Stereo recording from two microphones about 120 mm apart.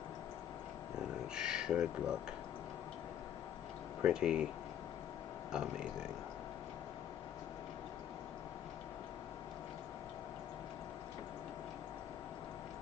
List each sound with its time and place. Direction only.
1.3 s speech: 5° right (ahead or behind)
4.0 s speech: 5° right (ahead or behind)
5.5 s a man's voice: 5° right (ahead or behind)